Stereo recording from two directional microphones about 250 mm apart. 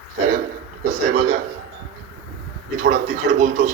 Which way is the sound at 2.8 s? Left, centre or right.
Right.